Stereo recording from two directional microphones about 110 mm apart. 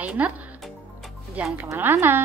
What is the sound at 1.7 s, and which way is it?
Speech, 20° right (ahead or behind).